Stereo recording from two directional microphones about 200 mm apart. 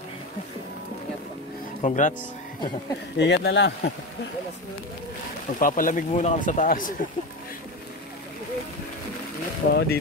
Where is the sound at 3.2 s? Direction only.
60° left (ahead or behind).